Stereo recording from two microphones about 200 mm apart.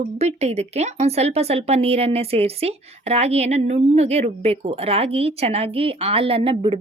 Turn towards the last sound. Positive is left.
turn(degrees=-25)  # may be behind; listen again after turning